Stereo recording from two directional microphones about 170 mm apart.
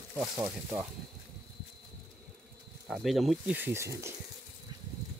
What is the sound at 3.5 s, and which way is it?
Speech, 15° right (ahead or behind).